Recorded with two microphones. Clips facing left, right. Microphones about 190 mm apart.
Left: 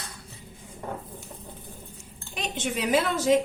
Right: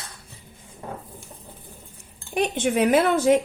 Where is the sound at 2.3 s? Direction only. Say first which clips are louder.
Right 9 dB; 55° right (ahead or behind).